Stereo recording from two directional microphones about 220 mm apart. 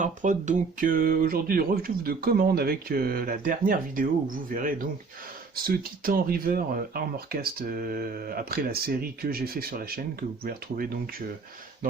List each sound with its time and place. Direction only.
0.0 s speech: 35° right (ahead or behind)